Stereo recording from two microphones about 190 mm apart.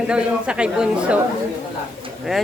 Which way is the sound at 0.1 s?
5° right (ahead or behind).